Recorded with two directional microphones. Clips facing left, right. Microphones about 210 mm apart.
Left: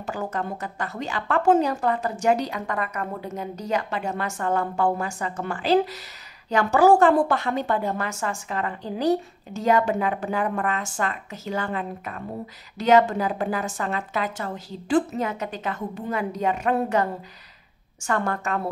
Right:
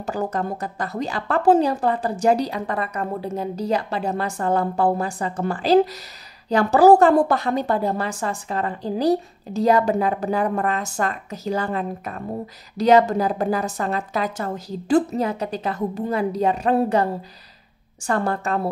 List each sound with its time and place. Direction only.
0.0 s a woman's voice: 40° right (ahead or behind)